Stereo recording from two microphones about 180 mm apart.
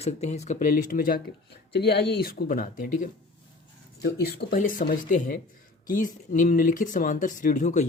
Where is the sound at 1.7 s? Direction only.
65° left (ahead or behind); by 3.1 s 50° left (ahead or behind).